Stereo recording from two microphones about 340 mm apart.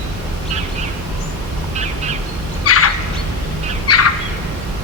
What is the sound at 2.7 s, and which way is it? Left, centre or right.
Turkey, left.